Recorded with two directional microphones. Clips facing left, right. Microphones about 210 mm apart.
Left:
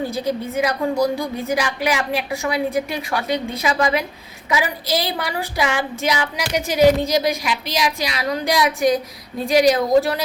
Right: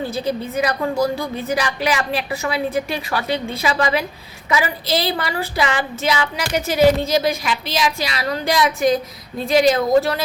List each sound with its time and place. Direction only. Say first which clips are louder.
0.1 s a woman's voice: even; 10° left (ahead or behind)
4.4 s a woman's voice: right 1 dB; 15° left (ahead or behind)